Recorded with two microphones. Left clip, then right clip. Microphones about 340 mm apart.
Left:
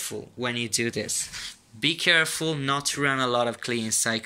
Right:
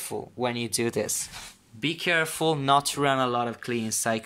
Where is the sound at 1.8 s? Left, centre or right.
Centre.